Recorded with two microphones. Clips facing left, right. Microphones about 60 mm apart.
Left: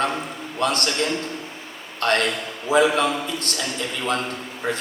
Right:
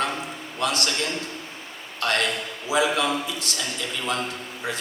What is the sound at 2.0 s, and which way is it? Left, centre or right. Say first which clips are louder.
A man's voice: left 3 dB; left.